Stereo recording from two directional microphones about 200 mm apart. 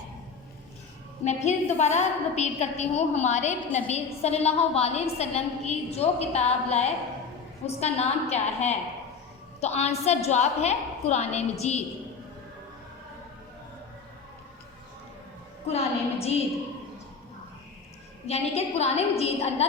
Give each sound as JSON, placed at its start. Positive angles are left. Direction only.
{"t": 1.2, "sound": "a woman's voice", "side_deg": 35}
{"t": 15.6, "sound": "a woman's voice", "side_deg": 30}
{"t": 18.3, "sound": "a woman's voice", "side_deg": 30}